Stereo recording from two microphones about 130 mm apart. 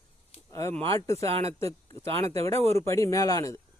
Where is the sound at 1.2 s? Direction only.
50° right (ahead or behind).